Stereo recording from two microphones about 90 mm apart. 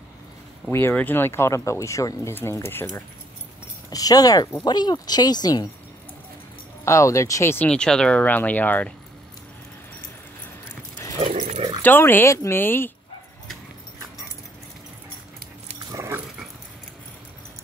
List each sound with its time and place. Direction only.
0.7 s speech: 25° left (ahead or behind)
3.9 s speech: 45° left (ahead or behind)
6.8 s speech: 35° left (ahead or behind)
7.5 s speech: 15° left (ahead or behind)
11.1 s dog: 70° right (ahead or behind)
11.8 s speech: 25° left (ahead or behind)
15.9 s dog: 35° right (ahead or behind)